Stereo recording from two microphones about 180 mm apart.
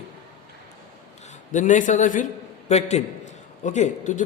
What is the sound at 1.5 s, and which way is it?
A man's voice, 45° left (ahead or behind).